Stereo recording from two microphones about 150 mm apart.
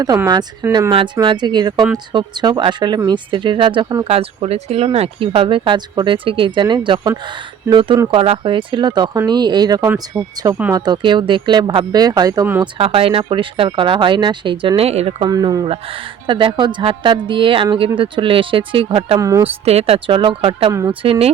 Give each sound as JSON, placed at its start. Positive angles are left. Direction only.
{"t": 0.7, "sound": "speech", "side_deg": -30}
{"t": 9.9, "sound": "speech", "side_deg": -15}
{"t": 12.8, "sound": "speech", "side_deg": -40}
{"t": 15.3, "sound": "speech", "side_deg": -25}
{"t": 19.2, "sound": "speech", "side_deg": -20}
{"t": 19.5, "sound": "speech", "side_deg": -40}